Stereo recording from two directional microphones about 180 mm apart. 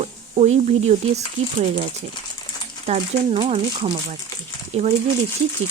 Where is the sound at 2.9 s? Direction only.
35° right (ahead or behind).